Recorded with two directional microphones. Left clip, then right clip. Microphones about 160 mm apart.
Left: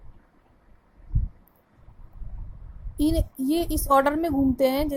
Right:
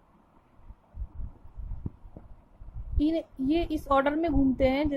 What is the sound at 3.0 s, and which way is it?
A woman's voice, 20° left (ahead or behind).